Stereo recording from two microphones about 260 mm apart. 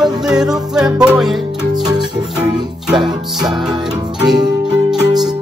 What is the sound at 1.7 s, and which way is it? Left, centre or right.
Music, centre.